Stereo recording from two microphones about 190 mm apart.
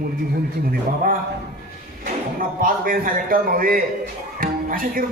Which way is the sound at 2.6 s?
50° right (ahead or behind).